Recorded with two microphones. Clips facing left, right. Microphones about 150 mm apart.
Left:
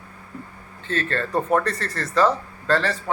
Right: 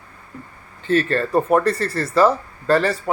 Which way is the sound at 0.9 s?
10° right (ahead or behind).